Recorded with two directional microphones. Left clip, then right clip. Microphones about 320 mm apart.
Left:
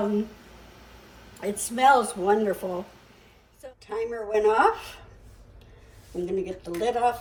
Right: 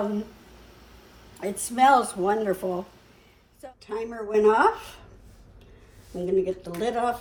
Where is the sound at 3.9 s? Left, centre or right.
Centre.